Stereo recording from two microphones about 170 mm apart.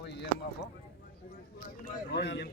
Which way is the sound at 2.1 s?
85° left.